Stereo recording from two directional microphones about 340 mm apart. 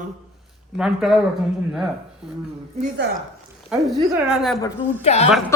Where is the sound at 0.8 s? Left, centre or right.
Centre.